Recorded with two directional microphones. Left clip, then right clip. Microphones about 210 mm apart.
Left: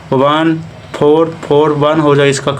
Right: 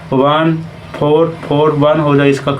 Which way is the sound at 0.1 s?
45° left (ahead or behind).